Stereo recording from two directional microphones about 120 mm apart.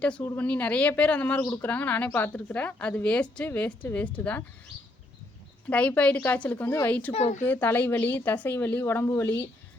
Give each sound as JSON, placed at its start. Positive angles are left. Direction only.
{"t": 0.0, "sound": "a woman's voice", "side_deg": 10}
{"t": 1.4, "sound": "speech", "side_deg": 30}
{"t": 1.6, "sound": "a woman's voice", "side_deg": 15}
{"t": 5.6, "sound": "a woman's voice", "side_deg": 15}
{"t": 7.1, "sound": "speech", "side_deg": 60}
{"t": 7.4, "sound": "a woman's voice", "side_deg": 15}